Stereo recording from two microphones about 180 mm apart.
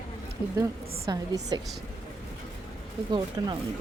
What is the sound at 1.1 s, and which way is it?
Speech, 25° right (ahead or behind).